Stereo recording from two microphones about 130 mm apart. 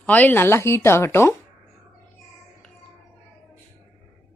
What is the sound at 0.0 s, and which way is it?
Speech, 10° left (ahead or behind).